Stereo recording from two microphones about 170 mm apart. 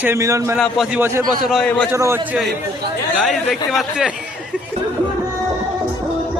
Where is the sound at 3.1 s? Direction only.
Centre (ahead or behind).